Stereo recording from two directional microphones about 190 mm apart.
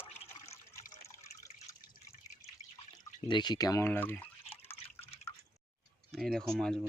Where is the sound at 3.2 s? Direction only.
25° left (ahead or behind).